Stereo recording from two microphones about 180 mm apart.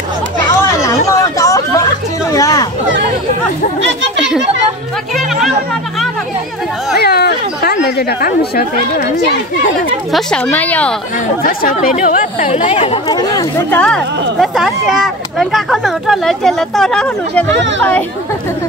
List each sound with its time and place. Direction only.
0.6 s chatter: 15° left (ahead or behind)
2.3 s a sound: 20° left (ahead or behind)
5.1 s chatter: centre (ahead or behind)
7.0 s chatter: 60° left (ahead or behind)
7.8 s speech: 60° left (ahead or behind)
10.1 s a woman's voice: 5° left (ahead or behind)
11.4 s speech: 50° left (ahead or behind)
12.6 s speech: 30° left (ahead or behind)
13.7 s a woman's voice: 5° left (ahead or behind)
17.6 s a child's voice: 90° right